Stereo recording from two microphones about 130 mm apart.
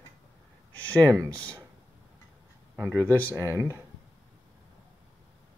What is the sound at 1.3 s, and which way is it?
Speech, 10° left (ahead or behind).